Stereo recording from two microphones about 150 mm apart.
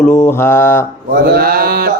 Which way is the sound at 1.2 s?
85° right.